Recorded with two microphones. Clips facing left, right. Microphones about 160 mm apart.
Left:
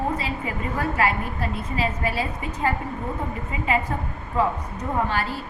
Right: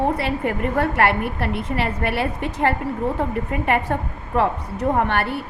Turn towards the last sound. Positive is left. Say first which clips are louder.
# right 4 dB
turn(degrees=-65)  # may be behind; listen again after turning